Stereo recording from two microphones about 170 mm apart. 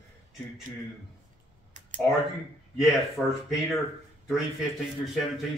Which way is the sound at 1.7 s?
50° right (ahead or behind).